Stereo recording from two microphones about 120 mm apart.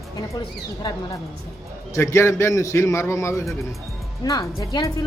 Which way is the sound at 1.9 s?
20° left (ahead or behind).